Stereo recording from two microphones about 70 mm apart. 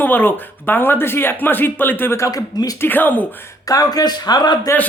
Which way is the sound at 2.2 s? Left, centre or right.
Left.